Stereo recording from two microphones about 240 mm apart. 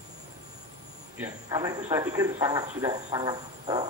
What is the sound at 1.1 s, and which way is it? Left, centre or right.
Speech, centre.